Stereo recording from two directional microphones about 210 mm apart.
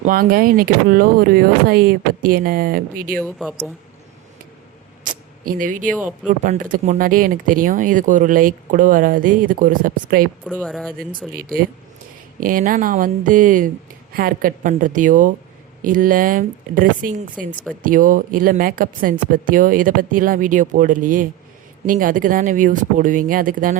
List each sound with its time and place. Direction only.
0.0 s speech: 40° right (ahead or behind)
3.2 s speech: 5° left (ahead or behind)
5.0 s a sound: 40° right (ahead or behind)
6.4 s speech: 40° right (ahead or behind)
10.5 s speech: 5° left (ahead or behind)
12.4 s speech: 40° right (ahead or behind)